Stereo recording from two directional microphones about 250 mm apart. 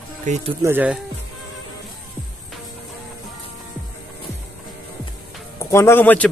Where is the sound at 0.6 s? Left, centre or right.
Centre.